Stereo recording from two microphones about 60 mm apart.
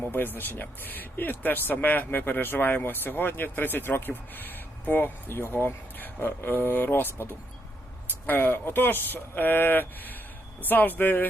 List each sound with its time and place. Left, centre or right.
0.1 s speech: left